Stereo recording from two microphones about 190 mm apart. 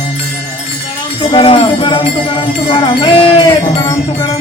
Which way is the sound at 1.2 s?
25° left (ahead or behind).